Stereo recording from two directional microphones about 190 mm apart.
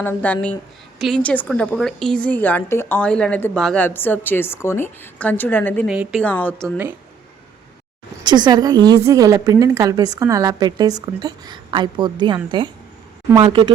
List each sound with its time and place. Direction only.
0.0 s a woman's voice: 10° left (ahead or behind)
5.9 s a woman's voice: 5° right (ahead or behind)
8.2 s a woman's voice: 20° right (ahead or behind)